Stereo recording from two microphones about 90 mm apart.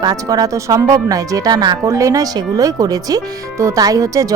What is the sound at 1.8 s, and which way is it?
Speech, 35° right (ahead or behind).